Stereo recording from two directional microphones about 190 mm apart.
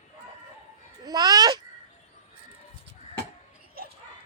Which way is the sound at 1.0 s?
20° right (ahead or behind).